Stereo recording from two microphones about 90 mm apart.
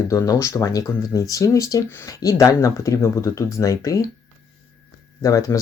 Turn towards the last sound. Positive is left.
turn(degrees=40)  # may be behind; listen again after turning